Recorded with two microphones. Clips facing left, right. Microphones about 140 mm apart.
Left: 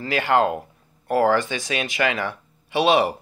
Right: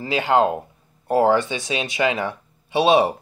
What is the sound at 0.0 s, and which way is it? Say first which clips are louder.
Speech: right 1 dB; 20° right (ahead or behind).